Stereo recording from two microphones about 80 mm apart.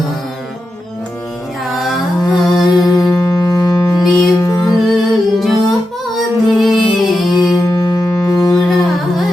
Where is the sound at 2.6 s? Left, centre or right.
Left.